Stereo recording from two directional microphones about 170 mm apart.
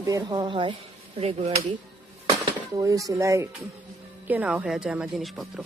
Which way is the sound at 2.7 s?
20° right (ahead or behind).